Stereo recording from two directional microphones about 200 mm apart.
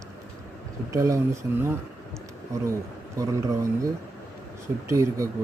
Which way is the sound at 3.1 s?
15° right (ahead or behind).